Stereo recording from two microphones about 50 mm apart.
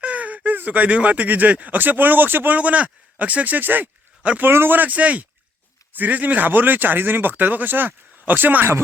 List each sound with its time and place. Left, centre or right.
0.0 s speech: right
2.6 s speech: right
4.2 s a man's voice: right
4.4 s speech: right
4.8 s speech: right